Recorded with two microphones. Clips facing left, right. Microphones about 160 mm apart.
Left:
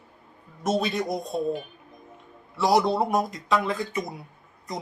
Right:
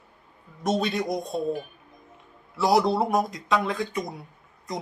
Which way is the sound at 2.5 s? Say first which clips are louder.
Even; centre (ahead or behind).